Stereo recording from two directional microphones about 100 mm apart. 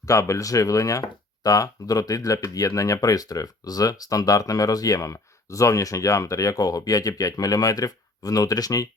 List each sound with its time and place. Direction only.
0.1 s speech: 30° left (ahead or behind)